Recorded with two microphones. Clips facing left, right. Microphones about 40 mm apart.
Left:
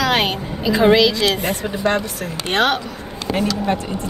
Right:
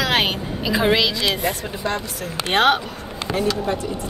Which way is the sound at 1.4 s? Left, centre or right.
Left.